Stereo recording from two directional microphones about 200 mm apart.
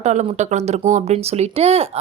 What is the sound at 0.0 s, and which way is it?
Speech, 35° right (ahead or behind).